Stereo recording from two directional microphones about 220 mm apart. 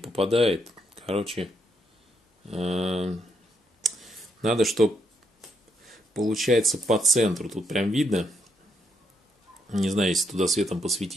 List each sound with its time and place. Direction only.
0.0 s typing: 25° right (ahead or behind)
0.5 s speech: 25° right (ahead or behind)
3.8 s clicking: centre (ahead or behind)
5.9 s speech: centre (ahead or behind)
9.8 s speech: centre (ahead or behind)
10.6 s speech: 30° right (ahead or behind)